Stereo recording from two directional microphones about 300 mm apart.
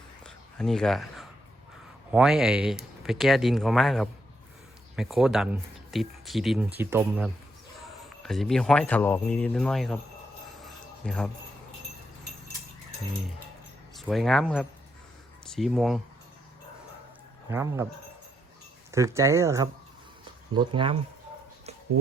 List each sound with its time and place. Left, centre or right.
0.3 s a sound: centre
2.0 s speech: centre
10.6 s a sound: centre
13.9 s speech: centre
17.5 s speech: centre
18.9 s speech: centre